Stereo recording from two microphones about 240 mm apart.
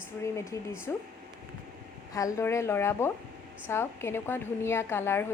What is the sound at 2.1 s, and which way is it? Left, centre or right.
Speech, centre.